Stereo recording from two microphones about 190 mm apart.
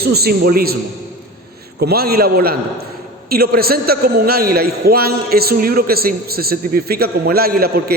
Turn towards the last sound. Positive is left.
turn(degrees=-55)  # may be behind; listen again after turning